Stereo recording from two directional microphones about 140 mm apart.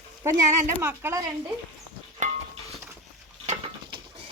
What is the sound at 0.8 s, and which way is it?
Speech, 20° right (ahead or behind).